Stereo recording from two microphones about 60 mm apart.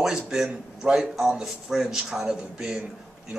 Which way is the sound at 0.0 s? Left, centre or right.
Centre.